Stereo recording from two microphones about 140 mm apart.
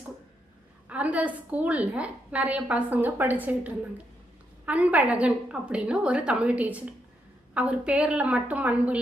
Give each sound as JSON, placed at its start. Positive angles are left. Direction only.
{"t": 0.9, "sound": "a woman's voice", "side_deg": -10}